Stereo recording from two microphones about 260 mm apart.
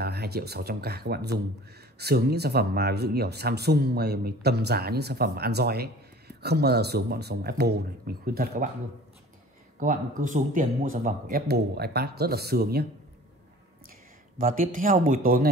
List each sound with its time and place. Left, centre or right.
0.0 s speech: right
9.8 s speech: right
14.4 s speech: right